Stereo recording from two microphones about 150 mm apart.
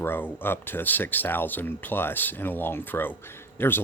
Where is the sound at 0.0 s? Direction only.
15° left (ahead or behind).